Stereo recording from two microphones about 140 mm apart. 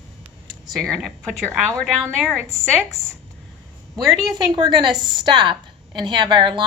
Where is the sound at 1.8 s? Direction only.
Centre (ahead or behind).